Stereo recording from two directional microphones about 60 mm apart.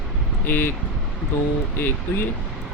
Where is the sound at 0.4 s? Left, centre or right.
Left.